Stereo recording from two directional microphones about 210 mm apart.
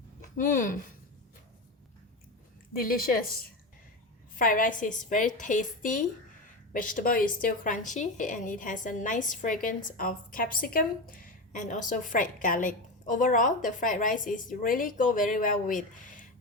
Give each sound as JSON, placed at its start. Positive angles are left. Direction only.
{"t": 0.3, "sound": "a woman's voice", "side_deg": 40}
{"t": 2.7, "sound": "a woman's voice", "side_deg": 45}
{"t": 4.4, "sound": "a woman's voice", "side_deg": 40}